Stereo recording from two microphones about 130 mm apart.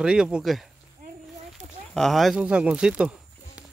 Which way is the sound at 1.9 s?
Centre (ahead or behind).